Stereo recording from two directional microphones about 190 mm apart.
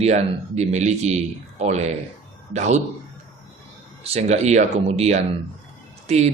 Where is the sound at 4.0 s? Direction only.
35° right (ahead or behind).